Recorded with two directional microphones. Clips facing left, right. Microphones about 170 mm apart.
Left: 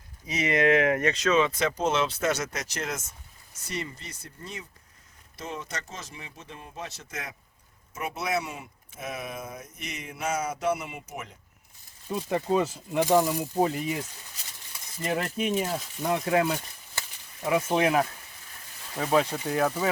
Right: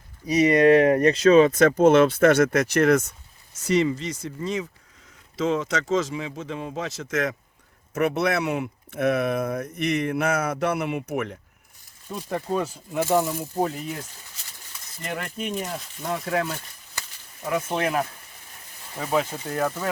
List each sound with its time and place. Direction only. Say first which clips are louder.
0.4 s speech: right 6 dB; 35° right (ahead or behind); by 3.1 s 60° right (ahead or behind)
3.5 s speech: right 14 dB; 90° right
7.9 s speech: right 8 dB; 70° right (ahead or behind)
12.0 s speech: left 1 dB; 5° left (ahead or behind)
15.0 s speech: left 3 dB; 5° left (ahead or behind)